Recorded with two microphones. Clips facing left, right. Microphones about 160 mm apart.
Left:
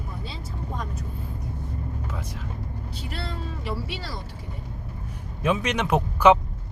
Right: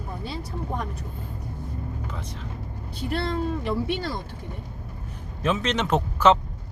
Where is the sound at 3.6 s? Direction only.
55° right (ahead or behind).